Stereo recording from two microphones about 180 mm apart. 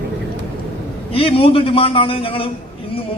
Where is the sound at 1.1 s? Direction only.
30° left (ahead or behind).